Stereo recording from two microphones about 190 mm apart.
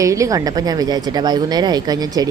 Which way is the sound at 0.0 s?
15° right (ahead or behind).